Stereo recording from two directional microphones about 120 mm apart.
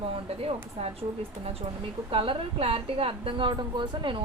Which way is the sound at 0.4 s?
55° right (ahead or behind).